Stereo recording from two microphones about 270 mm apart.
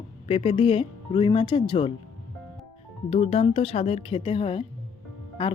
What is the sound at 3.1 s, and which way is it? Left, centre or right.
Speech, left.